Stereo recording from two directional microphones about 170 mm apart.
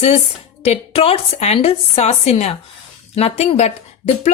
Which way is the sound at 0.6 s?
35° left (ahead or behind).